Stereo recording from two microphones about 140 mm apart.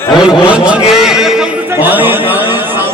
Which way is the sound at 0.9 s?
5° right (ahead or behind).